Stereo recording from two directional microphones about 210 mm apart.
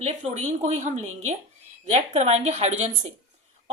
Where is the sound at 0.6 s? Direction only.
35° right (ahead or behind).